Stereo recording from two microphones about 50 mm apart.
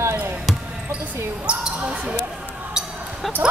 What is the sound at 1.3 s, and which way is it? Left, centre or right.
Speech, right.